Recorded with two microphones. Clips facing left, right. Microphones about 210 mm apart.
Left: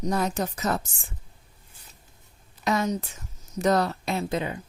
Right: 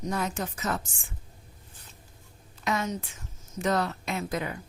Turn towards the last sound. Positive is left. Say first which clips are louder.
# left 4 dB
turn(degrees=25)  # may be behind; listen again after turning